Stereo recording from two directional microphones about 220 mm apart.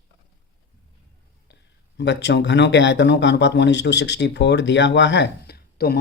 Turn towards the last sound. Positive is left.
turn(degrees=45)  # may be behind; listen again after turning